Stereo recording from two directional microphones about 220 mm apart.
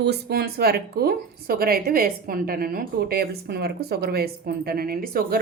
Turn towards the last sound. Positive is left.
turn(degrees=-45)  # may be behind; listen again after turning